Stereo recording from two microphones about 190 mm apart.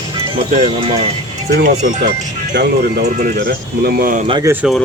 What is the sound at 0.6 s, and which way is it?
Speech, 30° right (ahead or behind).